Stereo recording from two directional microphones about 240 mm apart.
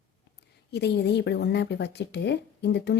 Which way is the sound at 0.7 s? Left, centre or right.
Left.